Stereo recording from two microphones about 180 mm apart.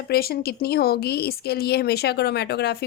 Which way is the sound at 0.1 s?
60° left (ahead or behind).